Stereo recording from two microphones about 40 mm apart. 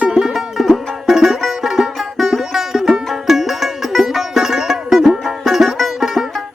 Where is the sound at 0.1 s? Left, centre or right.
Centre.